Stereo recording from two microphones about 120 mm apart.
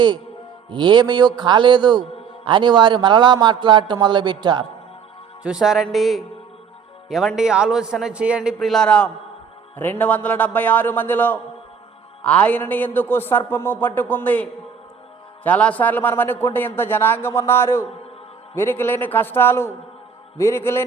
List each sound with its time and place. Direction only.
0.7 s a man's voice: 40° right (ahead or behind)
5.4 s a man's voice: 5° right (ahead or behind)
8.5 s a man's voice: centre (ahead or behind)
15.4 s a man's voice: 10° left (ahead or behind)